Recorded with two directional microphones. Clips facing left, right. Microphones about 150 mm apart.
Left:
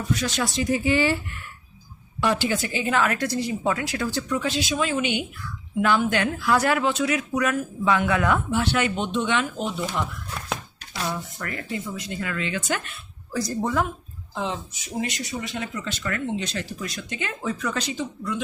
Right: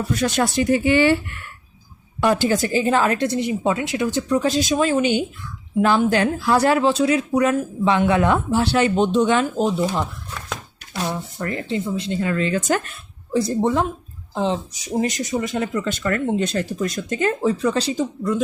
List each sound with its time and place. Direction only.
0.1 s speech: 55° right (ahead or behind); by 1.2 s 70° right (ahead or behind)
2.2 s a woman's voice: 45° right (ahead or behind); by 4.3 s 20° right (ahead or behind)
4.3 s speech: 40° right (ahead or behind)
11.0 s speech: 25° right (ahead or behind); by 13.0 s 40° right (ahead or behind)
13.3 s a woman's voice: 25° right (ahead or behind); by 17.5 s 40° right (ahead or behind)
17.5 s speech: 30° right (ahead or behind)